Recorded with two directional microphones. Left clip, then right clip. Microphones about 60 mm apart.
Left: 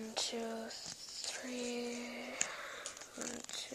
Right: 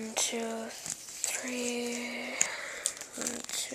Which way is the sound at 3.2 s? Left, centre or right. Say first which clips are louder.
Right 7 dB; centre.